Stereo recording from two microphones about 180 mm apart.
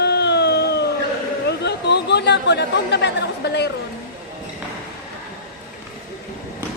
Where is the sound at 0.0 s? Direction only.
70° left (ahead or behind).